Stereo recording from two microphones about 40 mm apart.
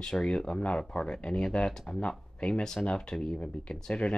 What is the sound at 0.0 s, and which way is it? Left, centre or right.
Speech, left.